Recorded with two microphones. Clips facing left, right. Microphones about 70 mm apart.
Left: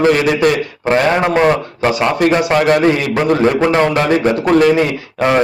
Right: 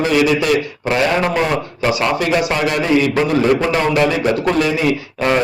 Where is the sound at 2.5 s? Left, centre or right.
Left.